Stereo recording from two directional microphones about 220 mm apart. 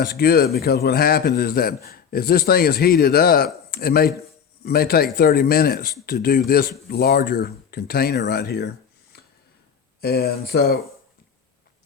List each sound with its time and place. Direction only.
0.0 s a man's voice: 45° left (ahead or behind)
10.0 s a man's voice: 45° left (ahead or behind)